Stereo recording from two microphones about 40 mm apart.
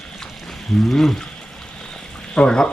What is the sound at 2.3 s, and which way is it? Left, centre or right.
Speech, left.